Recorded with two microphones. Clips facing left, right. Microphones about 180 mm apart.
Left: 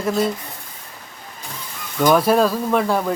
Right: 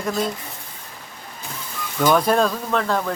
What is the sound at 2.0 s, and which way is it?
Speech, 5° left (ahead or behind).